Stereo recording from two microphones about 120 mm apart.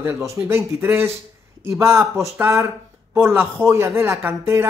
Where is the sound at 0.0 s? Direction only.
25° right (ahead or behind).